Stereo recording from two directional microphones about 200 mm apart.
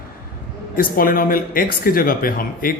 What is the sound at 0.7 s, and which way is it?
Speech, 45° left (ahead or behind).